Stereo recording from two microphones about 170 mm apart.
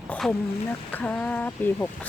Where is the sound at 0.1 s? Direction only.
10° left (ahead or behind).